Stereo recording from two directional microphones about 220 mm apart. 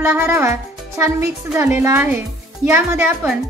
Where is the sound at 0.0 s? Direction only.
10° right (ahead or behind).